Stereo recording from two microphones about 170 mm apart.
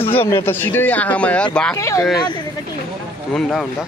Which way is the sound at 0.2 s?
15° left (ahead or behind).